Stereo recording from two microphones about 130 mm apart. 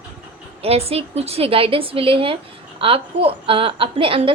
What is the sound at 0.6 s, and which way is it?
A woman's voice, 50° right (ahead or behind).